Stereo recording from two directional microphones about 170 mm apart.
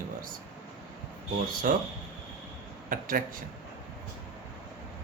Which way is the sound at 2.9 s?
55° right (ahead or behind).